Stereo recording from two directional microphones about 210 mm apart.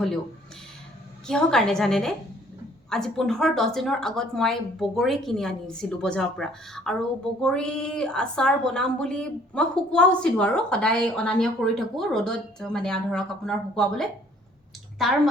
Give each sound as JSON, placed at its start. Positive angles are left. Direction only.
{"t": 1.3, "sound": "a woman's voice", "side_deg": 5}